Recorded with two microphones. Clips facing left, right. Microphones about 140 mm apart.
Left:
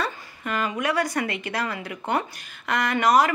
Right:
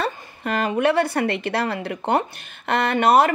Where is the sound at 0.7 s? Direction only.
30° right (ahead or behind).